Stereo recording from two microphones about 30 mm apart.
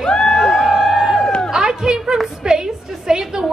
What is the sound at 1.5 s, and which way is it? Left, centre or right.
Chatter, right.